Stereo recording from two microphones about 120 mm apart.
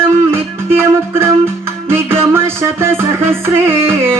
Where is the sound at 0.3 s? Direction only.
20° right (ahead or behind).